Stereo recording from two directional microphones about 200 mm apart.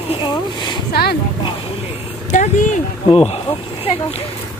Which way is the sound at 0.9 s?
50° left (ahead or behind).